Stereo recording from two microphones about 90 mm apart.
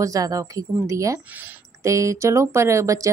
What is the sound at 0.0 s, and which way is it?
Speech, 40° right (ahead or behind).